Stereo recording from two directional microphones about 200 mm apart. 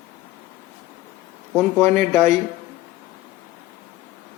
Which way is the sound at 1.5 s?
Centre (ahead or behind).